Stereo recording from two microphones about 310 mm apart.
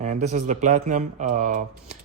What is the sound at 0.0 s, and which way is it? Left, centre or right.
Speech, right.